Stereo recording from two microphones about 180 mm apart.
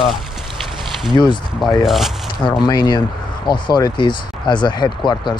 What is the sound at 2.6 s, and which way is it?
Speech, 25° left (ahead or behind).